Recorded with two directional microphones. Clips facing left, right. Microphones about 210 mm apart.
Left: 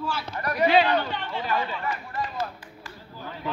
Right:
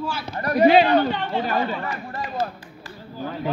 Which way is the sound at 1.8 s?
35° right (ahead or behind).